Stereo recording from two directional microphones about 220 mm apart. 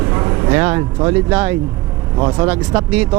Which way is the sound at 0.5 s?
15° right (ahead or behind).